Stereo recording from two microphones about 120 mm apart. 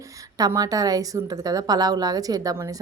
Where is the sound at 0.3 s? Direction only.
30° right (ahead or behind).